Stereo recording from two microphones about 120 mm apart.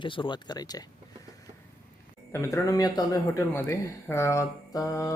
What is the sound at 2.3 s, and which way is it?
Speech, 25° left (ahead or behind).